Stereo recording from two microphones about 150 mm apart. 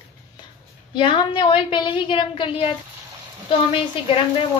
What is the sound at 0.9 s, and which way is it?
A woman's voice, 30° left (ahead or behind).